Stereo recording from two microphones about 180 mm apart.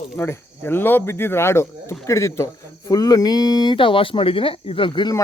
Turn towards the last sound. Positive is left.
turn(degrees=25)  # may be behind; listen again after turning